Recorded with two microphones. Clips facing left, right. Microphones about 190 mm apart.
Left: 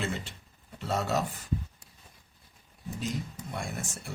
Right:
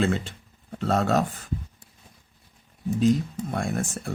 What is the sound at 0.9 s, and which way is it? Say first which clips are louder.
Speech: right 7 dB; 55° right (ahead or behind).